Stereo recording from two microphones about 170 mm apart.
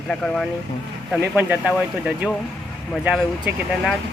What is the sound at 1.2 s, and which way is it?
Speech, 10° right (ahead or behind).